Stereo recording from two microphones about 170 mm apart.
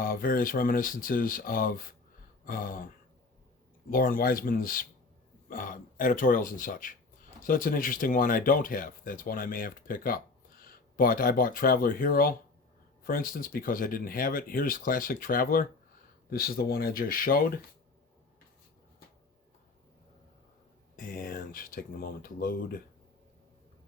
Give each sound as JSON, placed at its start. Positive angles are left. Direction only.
{"t": 0.0, "sound": "speech", "side_deg": 60}
{"t": 2.4, "sound": "a sound", "side_deg": 55}
{"t": 3.8, "sound": "speech", "side_deg": 55}
{"t": 20.9, "sound": "speech", "side_deg": 55}